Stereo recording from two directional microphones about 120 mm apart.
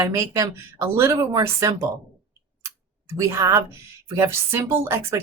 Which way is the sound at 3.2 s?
25° right (ahead or behind).